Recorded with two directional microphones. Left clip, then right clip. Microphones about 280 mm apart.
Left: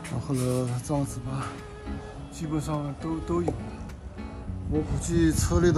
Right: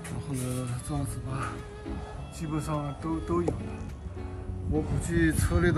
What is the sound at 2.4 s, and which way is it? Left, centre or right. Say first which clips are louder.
Speech: left 2 dB; centre.